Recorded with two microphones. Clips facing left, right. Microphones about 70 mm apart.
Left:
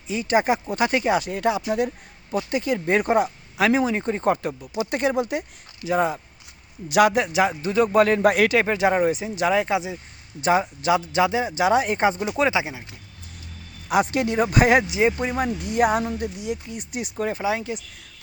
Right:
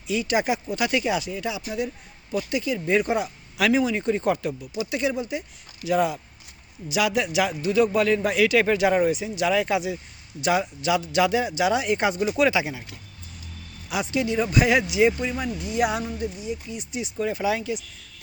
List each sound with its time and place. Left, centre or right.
0.1 s speech: left
5.8 s speech: left
6.8 s speech: left
8.5 s speech: left
12.2 s speech: left
12.5 s speech: left
13.8 s speech: left
16.7 s speech: left
17.4 s speech: left